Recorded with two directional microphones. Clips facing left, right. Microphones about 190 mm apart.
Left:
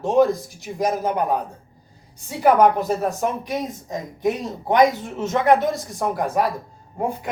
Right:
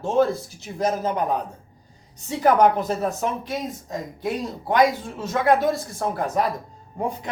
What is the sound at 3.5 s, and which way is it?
Speech, 20° left (ahead or behind).